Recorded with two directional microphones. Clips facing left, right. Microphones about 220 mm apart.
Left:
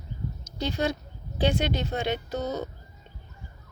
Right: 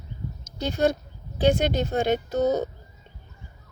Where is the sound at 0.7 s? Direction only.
50° right (ahead or behind).